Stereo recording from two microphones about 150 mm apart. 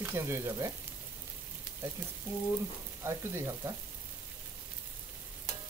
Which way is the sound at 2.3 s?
15° right (ahead or behind).